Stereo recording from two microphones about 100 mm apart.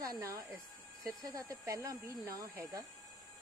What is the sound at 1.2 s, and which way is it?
Speech, 35° right (ahead or behind).